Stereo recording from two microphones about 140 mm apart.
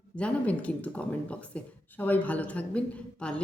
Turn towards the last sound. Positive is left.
turn(degrees=10)  # may be behind; listen again after turning